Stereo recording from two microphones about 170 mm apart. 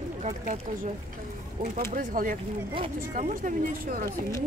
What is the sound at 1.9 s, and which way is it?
Speech, 55° right (ahead or behind).